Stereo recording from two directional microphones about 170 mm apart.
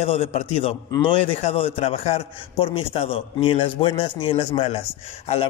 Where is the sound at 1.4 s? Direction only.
35° left (ahead or behind).